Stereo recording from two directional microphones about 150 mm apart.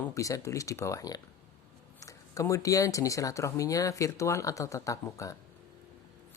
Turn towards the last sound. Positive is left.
turn(degrees=20)  # may be behind; listen again after turning